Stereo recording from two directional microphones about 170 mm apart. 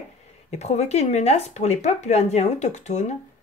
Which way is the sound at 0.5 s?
40° left (ahead or behind).